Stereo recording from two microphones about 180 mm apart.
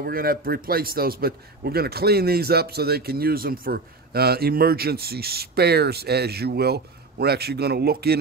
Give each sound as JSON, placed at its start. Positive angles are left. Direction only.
{"t": 0.0, "sound": "a man's voice", "side_deg": -55}